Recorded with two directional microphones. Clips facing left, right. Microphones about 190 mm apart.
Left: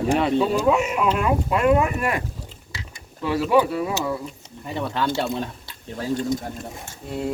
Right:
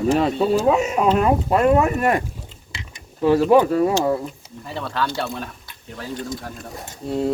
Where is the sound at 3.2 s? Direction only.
40° right (ahead or behind).